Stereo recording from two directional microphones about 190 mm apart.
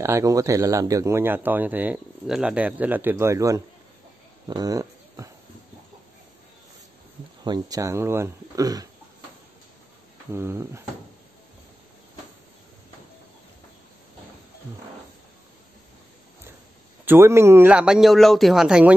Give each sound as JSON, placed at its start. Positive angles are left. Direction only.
{"t": 0.0, "sound": "speech", "side_deg": -15}
{"t": 7.4, "sound": "speech", "side_deg": -20}
{"t": 10.3, "sound": "speech", "side_deg": -15}
{"t": 17.0, "sound": "speech", "side_deg": -10}